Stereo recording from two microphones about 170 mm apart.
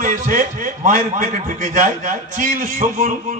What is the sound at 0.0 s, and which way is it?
A man's voice, 50° right (ahead or behind).